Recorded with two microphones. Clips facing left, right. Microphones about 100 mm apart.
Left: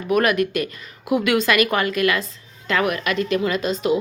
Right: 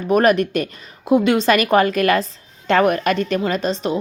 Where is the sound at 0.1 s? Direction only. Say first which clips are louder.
Right 4 dB; 35° right (ahead or behind).